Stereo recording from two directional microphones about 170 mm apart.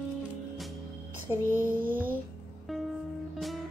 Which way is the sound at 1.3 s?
15° right (ahead or behind).